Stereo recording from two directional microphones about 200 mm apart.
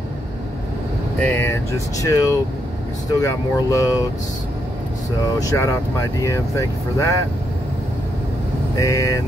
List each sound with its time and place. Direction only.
1.2 s speech: 10° left (ahead or behind)
5.4 s speech: 15° left (ahead or behind)
8.7 s speech: 15° left (ahead or behind)